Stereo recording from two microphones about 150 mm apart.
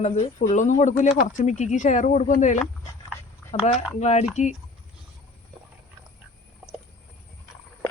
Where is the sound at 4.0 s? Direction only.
45° left (ahead or behind).